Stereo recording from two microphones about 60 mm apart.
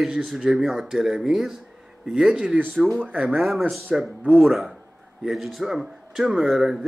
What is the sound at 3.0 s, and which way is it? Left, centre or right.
Speech, right.